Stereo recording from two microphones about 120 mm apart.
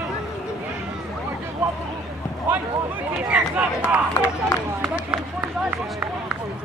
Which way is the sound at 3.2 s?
10° right (ahead or behind).